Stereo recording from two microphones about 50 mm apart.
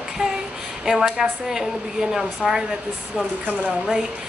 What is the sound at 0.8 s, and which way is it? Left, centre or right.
Speech, centre.